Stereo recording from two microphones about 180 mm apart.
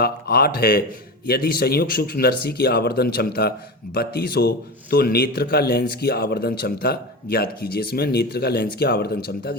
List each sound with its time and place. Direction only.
0.0 s a man's voice: 60° left (ahead or behind)